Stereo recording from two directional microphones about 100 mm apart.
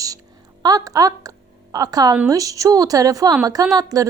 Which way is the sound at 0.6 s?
40° right (ahead or behind).